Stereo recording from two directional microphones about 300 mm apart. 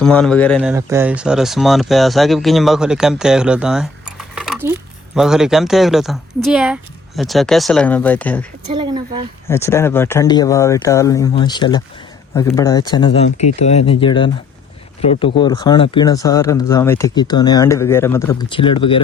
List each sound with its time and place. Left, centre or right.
0.0 s speech: centre
0.7 s speech: centre
8.7 s speech: centre
9.5 s speech: centre